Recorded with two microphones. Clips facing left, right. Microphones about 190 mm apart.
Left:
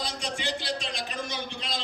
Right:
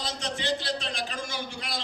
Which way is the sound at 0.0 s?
15° left (ahead or behind).